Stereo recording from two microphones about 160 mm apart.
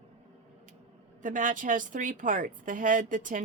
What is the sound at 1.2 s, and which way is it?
A woman's voice, 55° right (ahead or behind).